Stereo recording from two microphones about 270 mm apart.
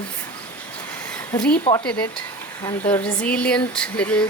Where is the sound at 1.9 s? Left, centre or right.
Centre.